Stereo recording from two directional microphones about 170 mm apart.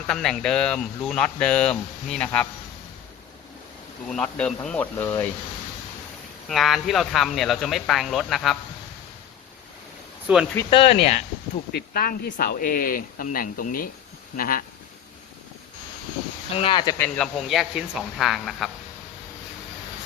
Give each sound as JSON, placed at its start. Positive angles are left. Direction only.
{"t": 0.1, "sound": "speech", "side_deg": 5}
{"t": 4.1, "sound": "speech", "side_deg": 5}
{"t": 6.5, "sound": "speech", "side_deg": 0}
{"t": 10.3, "sound": "speech", "side_deg": -10}
{"t": 10.7, "sound": "speech", "side_deg": 35}
{"t": 11.7, "sound": "speech", "side_deg": 65}
{"t": 16.6, "sound": "speech", "side_deg": 30}
{"t": 17.0, "sound": "speech", "side_deg": 5}